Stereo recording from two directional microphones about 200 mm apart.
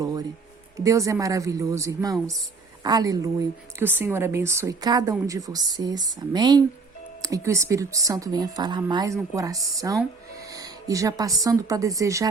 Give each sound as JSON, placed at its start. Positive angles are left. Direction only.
{"t": 0.0, "sound": "music", "side_deg": -20}
{"t": 0.9, "sound": "a woman's voice", "side_deg": -15}